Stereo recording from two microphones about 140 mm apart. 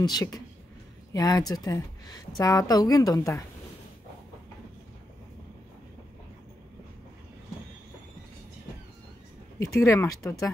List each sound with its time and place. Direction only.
0.0 s a woman's voice: 25° left (ahead or behind)
9.8 s a woman's voice: 20° left (ahead or behind)